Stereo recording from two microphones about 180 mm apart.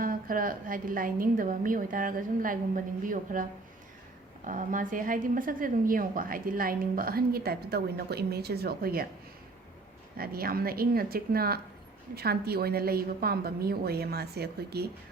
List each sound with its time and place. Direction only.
0.0 s a woman's voice: 50° right (ahead or behind)
4.4 s a woman's voice: 45° right (ahead or behind)
10.2 s a woman's voice: 55° right (ahead or behind)